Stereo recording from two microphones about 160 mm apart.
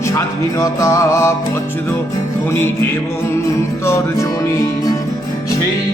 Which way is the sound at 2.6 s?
15° left (ahead or behind).